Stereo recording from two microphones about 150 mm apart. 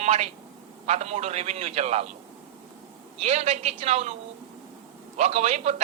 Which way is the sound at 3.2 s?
45° right (ahead or behind).